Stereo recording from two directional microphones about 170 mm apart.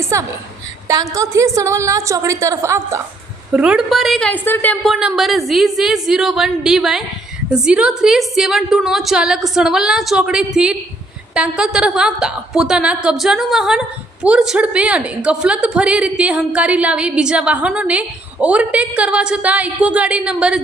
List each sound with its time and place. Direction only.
0.0 s a woman's voice: 15° right (ahead or behind)
3.5 s a woman's voice: 5° right (ahead or behind)